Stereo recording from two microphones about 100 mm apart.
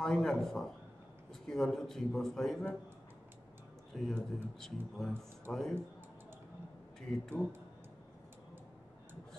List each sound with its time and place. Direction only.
0.0 s a man's voice: 5° left (ahead or behind)
3.9 s a man's voice: 5° left (ahead or behind)
7.0 s a man's voice: 5° left (ahead or behind)